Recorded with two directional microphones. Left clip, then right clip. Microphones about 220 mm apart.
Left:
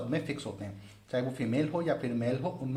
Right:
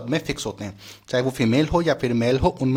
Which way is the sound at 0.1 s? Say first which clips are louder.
Right 13 dB; 30° right (ahead or behind).